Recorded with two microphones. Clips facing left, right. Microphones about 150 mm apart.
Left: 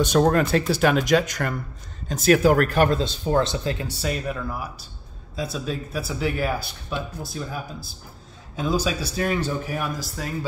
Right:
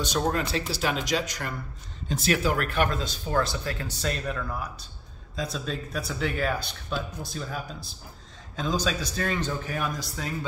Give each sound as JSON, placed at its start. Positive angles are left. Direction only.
{"t": 0.0, "sound": "speech", "side_deg": 55}
{"t": 3.8, "sound": "speech", "side_deg": 5}